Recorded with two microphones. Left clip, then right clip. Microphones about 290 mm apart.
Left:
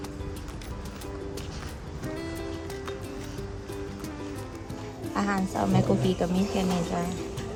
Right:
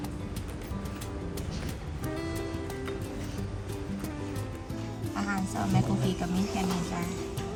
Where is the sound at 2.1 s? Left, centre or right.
Centre.